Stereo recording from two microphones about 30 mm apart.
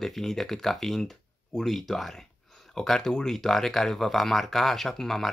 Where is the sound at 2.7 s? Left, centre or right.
Centre.